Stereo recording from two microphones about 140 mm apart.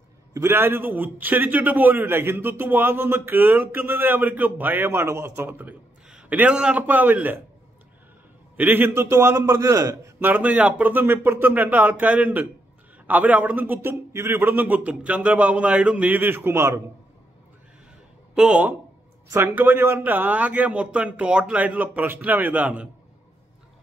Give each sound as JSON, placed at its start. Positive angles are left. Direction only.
{"t": 0.3, "sound": "a man's voice", "side_deg": -15}
{"t": 8.5, "sound": "a man's voice", "side_deg": -15}
{"t": 10.2, "sound": "a man's voice", "side_deg": -10}
{"t": 18.3, "sound": "a man's voice", "side_deg": -5}